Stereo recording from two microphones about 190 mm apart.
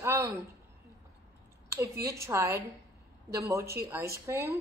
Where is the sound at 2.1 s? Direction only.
15° right (ahead or behind).